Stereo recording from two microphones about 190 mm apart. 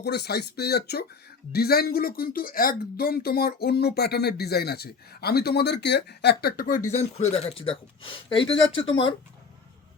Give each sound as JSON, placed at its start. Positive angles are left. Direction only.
{"t": 0.0, "sound": "speech", "side_deg": 60}